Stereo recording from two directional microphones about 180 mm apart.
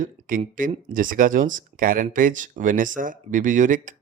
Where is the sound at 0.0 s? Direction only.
50° right (ahead or behind).